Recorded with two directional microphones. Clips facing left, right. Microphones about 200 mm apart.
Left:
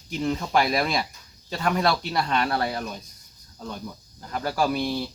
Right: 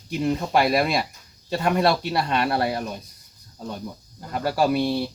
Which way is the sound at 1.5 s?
25° right (ahead or behind).